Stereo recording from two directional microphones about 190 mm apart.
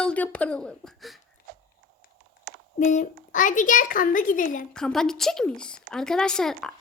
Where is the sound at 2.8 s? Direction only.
40° left (ahead or behind).